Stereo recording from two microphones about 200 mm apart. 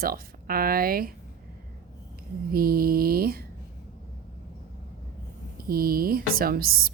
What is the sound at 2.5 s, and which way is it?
Speech, 50° right (ahead or behind).